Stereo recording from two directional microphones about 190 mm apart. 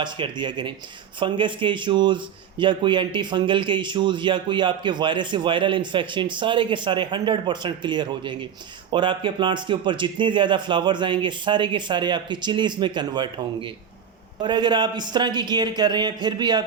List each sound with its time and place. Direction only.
0.0 s a man's voice: 25° right (ahead or behind)